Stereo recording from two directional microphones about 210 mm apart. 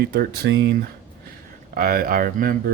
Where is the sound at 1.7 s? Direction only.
45° right (ahead or behind).